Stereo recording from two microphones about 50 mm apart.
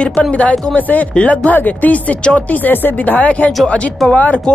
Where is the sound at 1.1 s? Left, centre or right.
Left.